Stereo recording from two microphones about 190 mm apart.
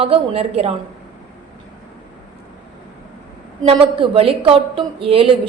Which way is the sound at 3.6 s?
25° right (ahead or behind).